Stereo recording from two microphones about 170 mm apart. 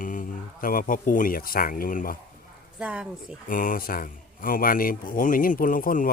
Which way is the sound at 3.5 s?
55° left (ahead or behind).